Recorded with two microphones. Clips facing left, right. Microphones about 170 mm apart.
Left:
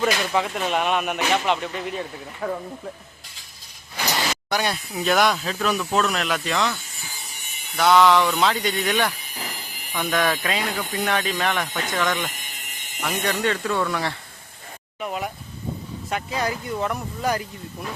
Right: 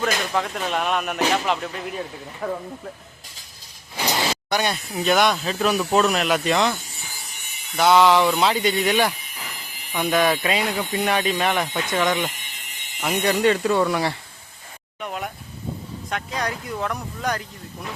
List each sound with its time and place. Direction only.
0.0 s speech: 5° left (ahead or behind)
4.5 s speech: centre (ahead or behind)
5.9 s speech: 25° right (ahead or behind)
6.1 s speech: 15° right (ahead or behind)
7.8 s speech: 5° right (ahead or behind)
8.8 s speech: 15° right (ahead or behind)
9.2 s a sound: 35° left (ahead or behind)
9.9 s speech: 10° right (ahead or behind)
12.6 s alarm: 45° left (ahead or behind)
13.1 s speech: 15° right (ahead or behind)
15.0 s a sound: centre (ahead or behind)
16.0 s speech: 5° left (ahead or behind)